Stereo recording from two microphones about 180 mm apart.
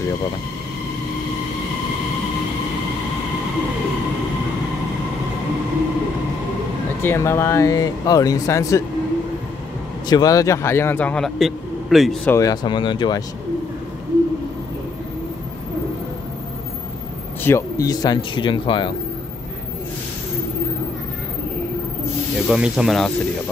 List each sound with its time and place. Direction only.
7.0 s a man's voice: 15° left (ahead or behind)
10.0 s a man's voice: 20° left (ahead or behind); by 12.2 s centre (ahead or behind)
12.3 s speech: 20° left (ahead or behind)
17.4 s speech: 15° left (ahead or behind)
22.5 s speech: 5° right (ahead or behind)